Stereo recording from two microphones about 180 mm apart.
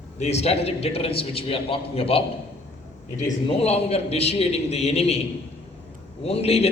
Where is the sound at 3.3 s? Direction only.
35° left (ahead or behind).